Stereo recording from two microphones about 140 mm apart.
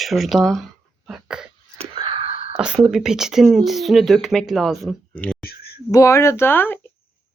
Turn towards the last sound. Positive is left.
turn(degrees=15)  # may be behind; listen again after turning